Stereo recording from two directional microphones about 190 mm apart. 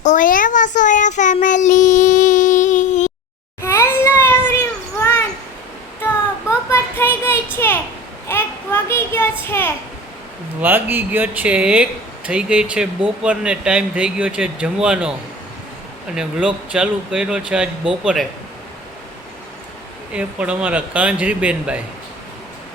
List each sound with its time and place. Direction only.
0.0 s child singing: 40° left (ahead or behind)
3.6 s a sound: 15° left (ahead or behind)
6.7 s child singing: 10° left (ahead or behind)
7.5 s a sound: 10° left (ahead or behind)
10.6 s speech: 10° right (ahead or behind)
16.1 s speech: 5° right (ahead or behind)
20.1 s speech: 5° right (ahead or behind)